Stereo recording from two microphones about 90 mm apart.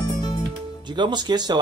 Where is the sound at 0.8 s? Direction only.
55° right (ahead or behind).